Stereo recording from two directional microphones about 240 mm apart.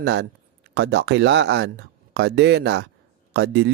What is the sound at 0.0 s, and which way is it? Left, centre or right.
Speech, right.